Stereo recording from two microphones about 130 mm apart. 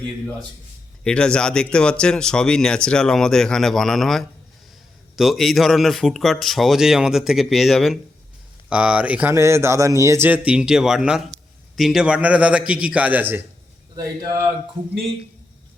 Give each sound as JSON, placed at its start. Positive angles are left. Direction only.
{"t": 1.0, "sound": "speech", "side_deg": 5}
{"t": 9.3, "sound": "speech", "side_deg": -20}
{"t": 13.9, "sound": "speech", "side_deg": -30}